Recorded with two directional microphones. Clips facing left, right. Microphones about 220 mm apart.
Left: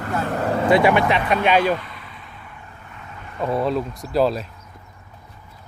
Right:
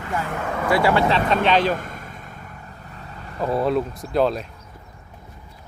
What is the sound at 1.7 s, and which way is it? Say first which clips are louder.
Vehicle: left 2 dB; 45° right (ahead or behind).